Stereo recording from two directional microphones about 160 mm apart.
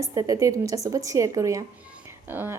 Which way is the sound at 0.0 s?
20° right (ahead or behind).